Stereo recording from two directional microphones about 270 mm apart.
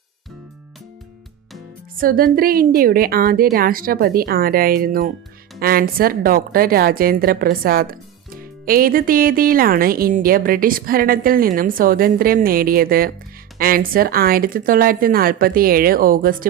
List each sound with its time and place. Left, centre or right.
2.0 s a woman's voice: right